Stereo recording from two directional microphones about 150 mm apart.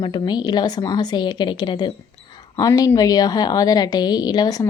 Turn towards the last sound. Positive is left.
turn(degrees=25)  # may be behind; listen again after turning